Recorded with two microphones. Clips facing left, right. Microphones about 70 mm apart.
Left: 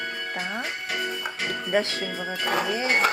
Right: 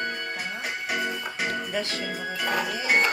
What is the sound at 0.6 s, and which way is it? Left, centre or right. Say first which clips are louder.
Music: right 1 dB; centre.